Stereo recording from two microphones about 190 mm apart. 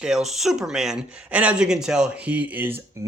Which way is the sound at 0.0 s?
Centre (ahead or behind).